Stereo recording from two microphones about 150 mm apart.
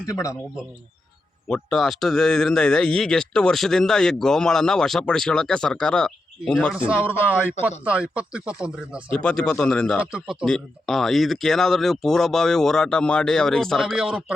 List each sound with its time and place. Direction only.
0.0 s speech: 20° left (ahead or behind)
1.5 s a man's voice: 5° left (ahead or behind)
6.7 s speech: 5° right (ahead or behind)
9.2 s a man's voice: 5° left (ahead or behind)
10.0 s a man's voice: 5° right (ahead or behind)